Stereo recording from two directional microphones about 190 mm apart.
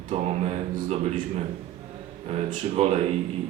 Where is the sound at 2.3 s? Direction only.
30° right (ahead or behind).